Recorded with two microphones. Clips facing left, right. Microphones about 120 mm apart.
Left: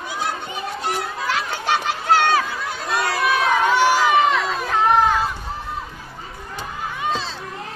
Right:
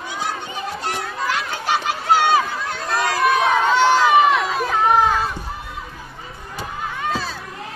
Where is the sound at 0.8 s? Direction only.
Centre (ahead or behind).